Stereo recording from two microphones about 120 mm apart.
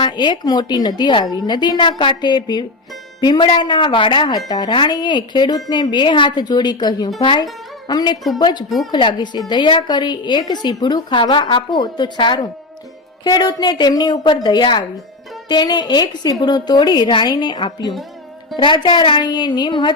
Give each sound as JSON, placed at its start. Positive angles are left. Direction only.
{"t": 0.0, "sound": "a woman's voice", "side_deg": 40}